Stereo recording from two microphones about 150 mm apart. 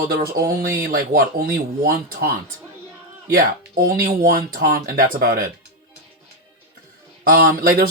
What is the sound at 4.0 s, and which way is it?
Speech, 75° right (ahead or behind).